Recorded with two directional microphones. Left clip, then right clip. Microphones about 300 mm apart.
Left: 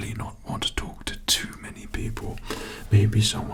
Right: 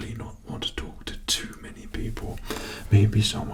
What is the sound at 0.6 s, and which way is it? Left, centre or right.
Speech, left.